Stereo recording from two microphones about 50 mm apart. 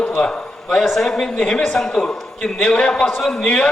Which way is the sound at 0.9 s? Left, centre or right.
Centre.